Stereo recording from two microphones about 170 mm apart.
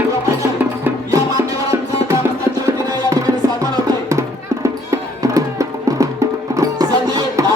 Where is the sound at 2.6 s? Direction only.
20° right (ahead or behind).